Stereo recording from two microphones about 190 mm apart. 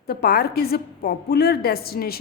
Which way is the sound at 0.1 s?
55° left (ahead or behind).